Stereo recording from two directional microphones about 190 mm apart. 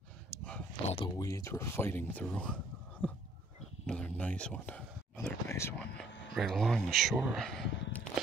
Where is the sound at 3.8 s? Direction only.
5° left (ahead or behind).